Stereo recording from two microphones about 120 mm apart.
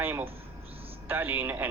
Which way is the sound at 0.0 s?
15° right (ahead or behind).